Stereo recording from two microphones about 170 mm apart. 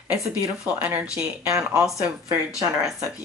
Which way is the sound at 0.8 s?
10° right (ahead or behind).